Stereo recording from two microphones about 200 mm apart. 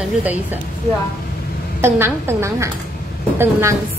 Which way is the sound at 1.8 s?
10° right (ahead or behind).